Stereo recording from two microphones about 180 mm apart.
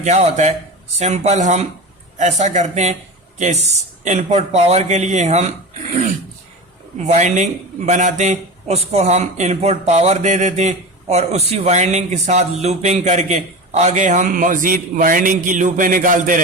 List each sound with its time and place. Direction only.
0.0 s a man's voice: 40° right (ahead or behind)
7.1 s a man's voice: 40° right (ahead or behind)